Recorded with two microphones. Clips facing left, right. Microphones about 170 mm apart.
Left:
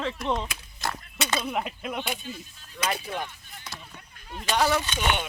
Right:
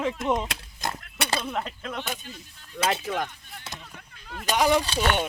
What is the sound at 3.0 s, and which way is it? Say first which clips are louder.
Speech: right 4 dB; 75° right (ahead or behind).